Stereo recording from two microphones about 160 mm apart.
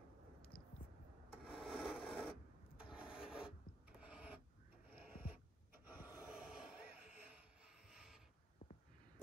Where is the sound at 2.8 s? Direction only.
5° right (ahead or behind).